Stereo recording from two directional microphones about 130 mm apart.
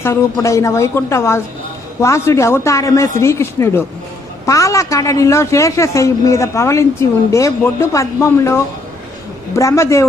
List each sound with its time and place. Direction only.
0.0 s a man's voice: 20° left (ahead or behind)